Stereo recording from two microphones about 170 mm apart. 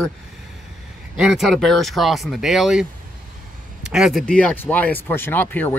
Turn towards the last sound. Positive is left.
turn(degrees=10)  # may be behind; listen again after turning